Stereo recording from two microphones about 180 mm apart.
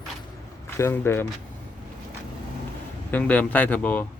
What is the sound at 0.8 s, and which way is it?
Speech, 15° left (ahead or behind).